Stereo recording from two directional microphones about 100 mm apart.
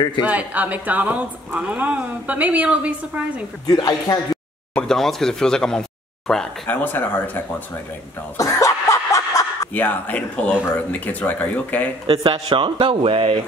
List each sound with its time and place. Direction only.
0.2 s speech: 15° right (ahead or behind)
3.6 s speech: 40° left (ahead or behind)
4.7 s speech: 5° left (ahead or behind)
6.7 s speech: 20° left (ahead or behind)
8.4 s snicker: 30° left (ahead or behind)
9.8 s speech: 15° left (ahead or behind)
12.1 s speech: 65° right (ahead or behind)
12.4 s speech: 55° right (ahead or behind)